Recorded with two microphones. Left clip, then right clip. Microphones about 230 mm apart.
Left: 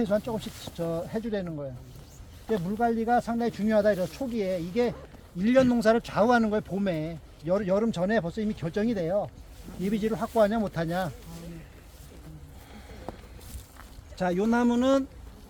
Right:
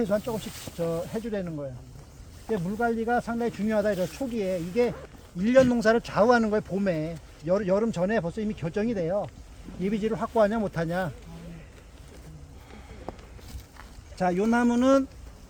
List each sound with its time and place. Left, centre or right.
0.0 s speech: centre
14.2 s speech: centre